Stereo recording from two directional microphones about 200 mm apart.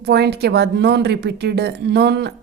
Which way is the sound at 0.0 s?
55° right (ahead or behind).